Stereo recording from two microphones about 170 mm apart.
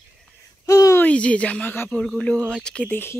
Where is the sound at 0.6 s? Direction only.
20° left (ahead or behind).